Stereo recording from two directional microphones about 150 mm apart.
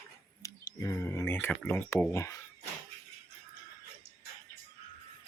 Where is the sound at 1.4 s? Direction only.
15° left (ahead or behind).